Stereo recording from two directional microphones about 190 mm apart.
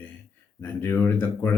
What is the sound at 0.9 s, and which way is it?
Speech, 10° left (ahead or behind).